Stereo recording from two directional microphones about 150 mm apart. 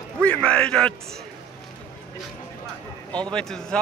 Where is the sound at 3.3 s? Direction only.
5° left (ahead or behind).